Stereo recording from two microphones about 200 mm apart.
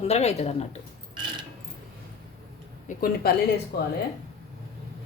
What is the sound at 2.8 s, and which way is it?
Speech, 45° left (ahead or behind).